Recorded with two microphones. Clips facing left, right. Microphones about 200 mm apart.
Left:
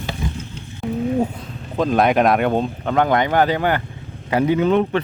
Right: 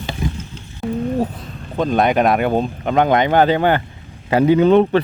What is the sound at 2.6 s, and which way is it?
Speech, 20° right (ahead or behind).